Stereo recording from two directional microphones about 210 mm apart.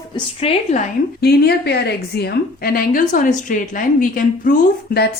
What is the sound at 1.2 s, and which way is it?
A woman's voice, 50° left (ahead or behind).